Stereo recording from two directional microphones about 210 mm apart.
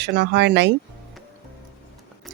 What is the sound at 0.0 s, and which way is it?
Speech, 55° right (ahead or behind).